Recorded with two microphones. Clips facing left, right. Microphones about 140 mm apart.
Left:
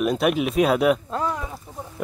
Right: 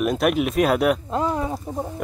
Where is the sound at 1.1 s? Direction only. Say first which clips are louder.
Right 3 dB; 20° right (ahead or behind).